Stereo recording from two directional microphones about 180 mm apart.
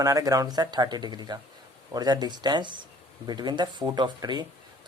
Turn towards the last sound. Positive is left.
turn(degrees=-25)  # may be behind; listen again after turning